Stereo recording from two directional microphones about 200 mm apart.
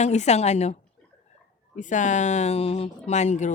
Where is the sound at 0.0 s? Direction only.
35° left (ahead or behind).